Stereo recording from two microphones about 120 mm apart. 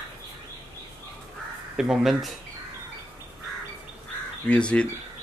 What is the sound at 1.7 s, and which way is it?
Speech, 5° right (ahead or behind).